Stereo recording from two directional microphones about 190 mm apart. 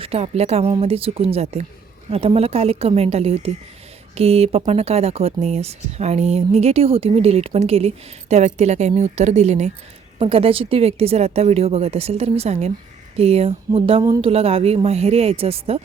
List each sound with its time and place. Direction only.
0.0 s speech: 30° right (ahead or behind)